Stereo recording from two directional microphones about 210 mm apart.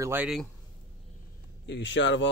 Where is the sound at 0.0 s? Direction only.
10° right (ahead or behind).